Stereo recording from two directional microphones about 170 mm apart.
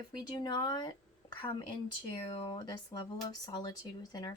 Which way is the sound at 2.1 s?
25° left (ahead or behind).